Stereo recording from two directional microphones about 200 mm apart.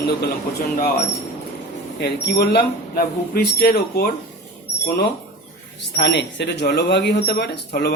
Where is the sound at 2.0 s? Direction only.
55° left (ahead or behind).